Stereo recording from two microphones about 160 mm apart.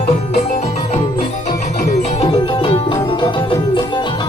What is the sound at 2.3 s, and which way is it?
Music, 30° left (ahead or behind).